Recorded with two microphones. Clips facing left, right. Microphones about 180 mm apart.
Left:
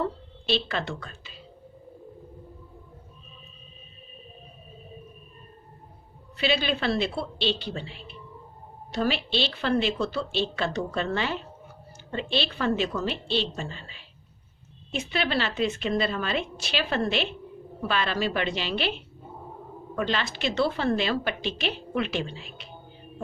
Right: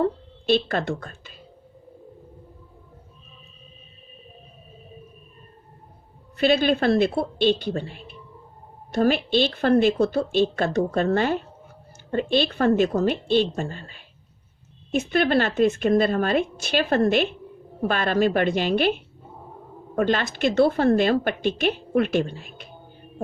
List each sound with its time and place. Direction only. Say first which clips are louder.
0.0 s speech: right 7 dB; 50° right (ahead or behind)
6.3 s a woman's voice: right 7 dB; 50° right (ahead or behind)